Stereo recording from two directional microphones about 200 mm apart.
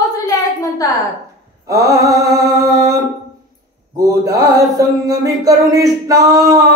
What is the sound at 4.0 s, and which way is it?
Mantra, 15° right (ahead or behind).